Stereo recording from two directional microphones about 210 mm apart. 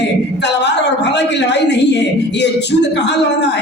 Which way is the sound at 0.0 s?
55° left (ahead or behind).